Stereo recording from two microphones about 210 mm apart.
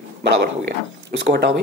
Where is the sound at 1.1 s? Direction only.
55° right (ahead or behind).